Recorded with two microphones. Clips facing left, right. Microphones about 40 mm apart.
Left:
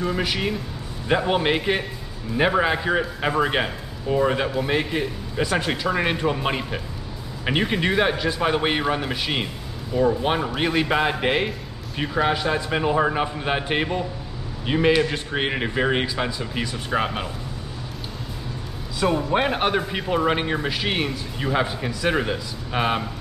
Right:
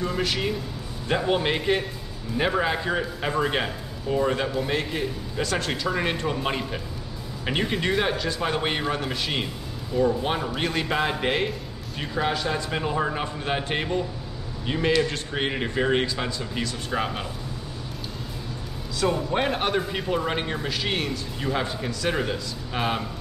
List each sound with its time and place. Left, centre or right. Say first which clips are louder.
0.0 s a man's voice: left 2 dB; centre
18.9 s a man's voice: left 3 dB; centre